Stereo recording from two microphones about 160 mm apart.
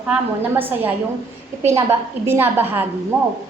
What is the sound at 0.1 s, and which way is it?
A woman's voice, 10° right (ahead or behind).